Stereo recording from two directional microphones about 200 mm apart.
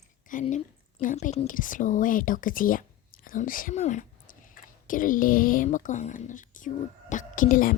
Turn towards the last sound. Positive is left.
turn(degrees=45)  # may be behind; listen again after turning